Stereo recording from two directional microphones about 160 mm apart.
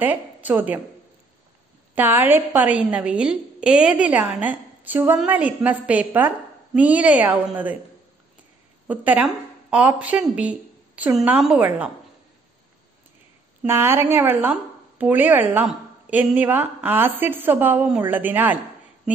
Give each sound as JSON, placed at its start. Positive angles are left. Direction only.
{"t": 0.0, "sound": "a woman's voice", "side_deg": -10}
{"t": 2.0, "sound": "a woman's voice", "side_deg": -15}
{"t": 8.8, "sound": "a woman's voice", "side_deg": -10}
{"t": 13.6, "sound": "a woman's voice", "side_deg": -15}